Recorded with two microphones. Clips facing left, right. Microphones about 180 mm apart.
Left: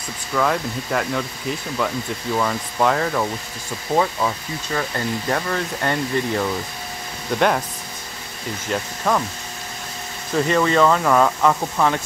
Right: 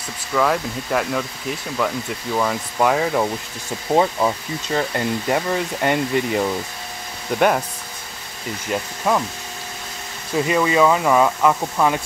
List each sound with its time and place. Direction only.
0.3 s speech: centre (ahead or behind)
2.3 s speech: 5° right (ahead or behind)
3.9 s speech: 20° right (ahead or behind)
8.6 s speech: 5° right (ahead or behind)
10.3 s speech: 10° right (ahead or behind)